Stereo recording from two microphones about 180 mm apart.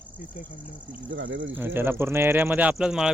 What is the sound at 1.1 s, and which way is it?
Speech, 90° right.